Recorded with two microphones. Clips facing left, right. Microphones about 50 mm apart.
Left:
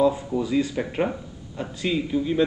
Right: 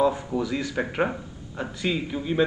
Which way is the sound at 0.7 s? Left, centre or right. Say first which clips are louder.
Even; centre.